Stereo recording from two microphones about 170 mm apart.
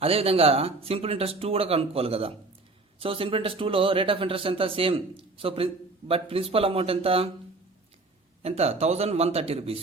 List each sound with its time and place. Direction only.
0.0 s speech: 35° right (ahead or behind)
8.4 s speech: 40° right (ahead or behind)